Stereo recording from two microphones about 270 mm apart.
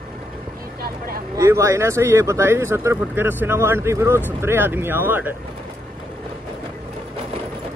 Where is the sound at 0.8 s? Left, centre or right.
Right.